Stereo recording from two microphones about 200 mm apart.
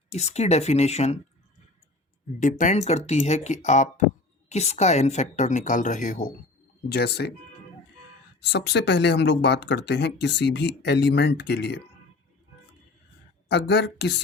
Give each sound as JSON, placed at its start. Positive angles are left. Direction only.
{"t": 0.1, "sound": "a woman's voice", "side_deg": 35}
{"t": 2.4, "sound": "a woman's voice", "side_deg": 40}
{"t": 6.8, "sound": "speech", "side_deg": 55}
{"t": 8.4, "sound": "speech", "side_deg": 60}
{"t": 13.5, "sound": "speech", "side_deg": 60}